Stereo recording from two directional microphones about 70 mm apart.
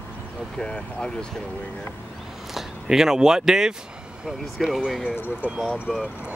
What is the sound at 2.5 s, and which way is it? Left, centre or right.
Speech, centre.